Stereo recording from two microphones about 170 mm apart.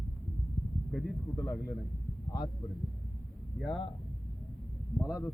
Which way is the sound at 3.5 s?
Centre (ahead or behind).